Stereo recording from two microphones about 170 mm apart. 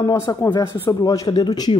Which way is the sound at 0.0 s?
25° left (ahead or behind).